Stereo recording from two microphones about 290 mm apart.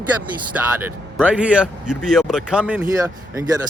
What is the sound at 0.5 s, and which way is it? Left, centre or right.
Speech, centre.